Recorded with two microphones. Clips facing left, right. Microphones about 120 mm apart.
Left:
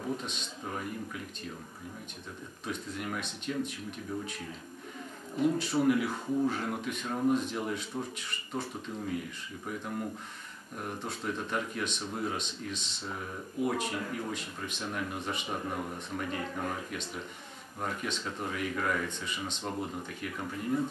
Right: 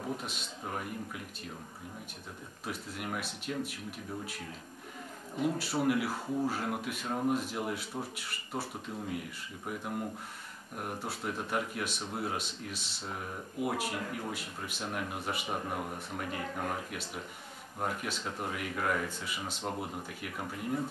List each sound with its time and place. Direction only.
0.2 s speech: 5° right (ahead or behind)
2.6 s speech: 5° right (ahead or behind)
5.4 s speech: 5° right (ahead or behind)